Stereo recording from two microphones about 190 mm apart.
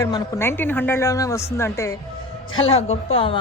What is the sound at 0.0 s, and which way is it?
A woman's voice, 15° left (ahead or behind).